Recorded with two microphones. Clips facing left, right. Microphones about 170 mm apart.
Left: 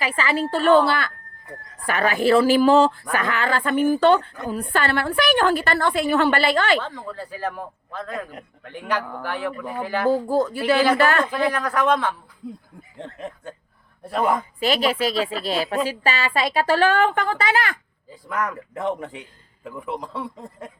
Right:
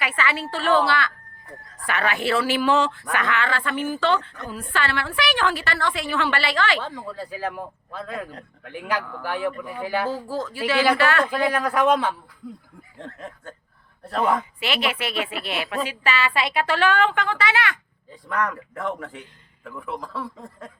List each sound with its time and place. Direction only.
0.0 s a woman's voice: 35° left (ahead or behind)
6.7 s speech: 10° right (ahead or behind)
10.5 s a woman's voice: 40° left (ahead or behind)
11.3 s speech: 10° right (ahead or behind)
13.0 s a man's voice: 20° left (ahead or behind)
14.6 s speech: 35° left (ahead or behind)
18.1 s speech: 5° left (ahead or behind)
18.7 s a man's voice: 20° left (ahead or behind)